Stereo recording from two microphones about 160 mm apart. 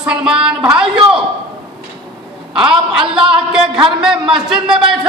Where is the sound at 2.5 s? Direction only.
5° right (ahead or behind).